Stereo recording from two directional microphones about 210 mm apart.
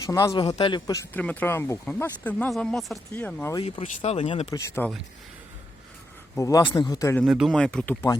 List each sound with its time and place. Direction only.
0.0 s speech: 15° left (ahead or behind)
3.6 s speech: 25° left (ahead or behind)
4.5 s speech: 15° left (ahead or behind)
6.3 s speech: 15° left (ahead or behind)
7.3 s speech: centre (ahead or behind)